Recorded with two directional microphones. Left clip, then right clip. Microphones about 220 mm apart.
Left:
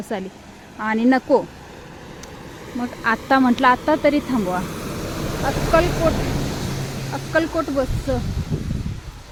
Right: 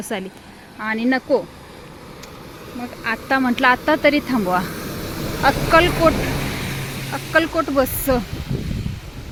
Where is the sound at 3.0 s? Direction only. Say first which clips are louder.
Left 2 dB; 15° left (ahead or behind).